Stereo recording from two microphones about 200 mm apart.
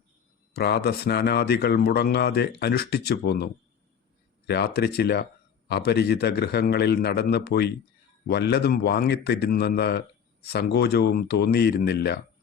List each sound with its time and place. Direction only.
0.5 s speech: 50° left (ahead or behind)